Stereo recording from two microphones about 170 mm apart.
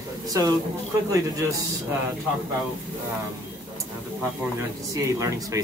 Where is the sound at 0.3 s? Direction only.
25° right (ahead or behind).